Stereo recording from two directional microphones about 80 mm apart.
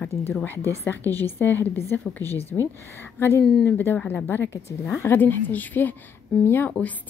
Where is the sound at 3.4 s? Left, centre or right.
Centre.